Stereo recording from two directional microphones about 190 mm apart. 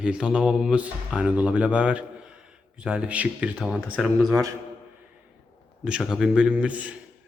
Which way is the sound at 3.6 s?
5° left (ahead or behind).